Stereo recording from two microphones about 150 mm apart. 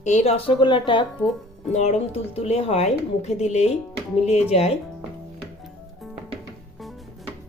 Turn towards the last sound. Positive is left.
turn(degrees=0)  # may be behind; listen again after turning